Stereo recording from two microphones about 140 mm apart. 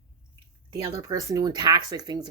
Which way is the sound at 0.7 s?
25° right (ahead or behind).